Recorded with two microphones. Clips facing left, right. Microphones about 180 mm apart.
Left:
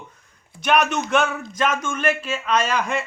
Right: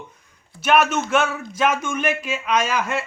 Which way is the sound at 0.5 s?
5° right (ahead or behind).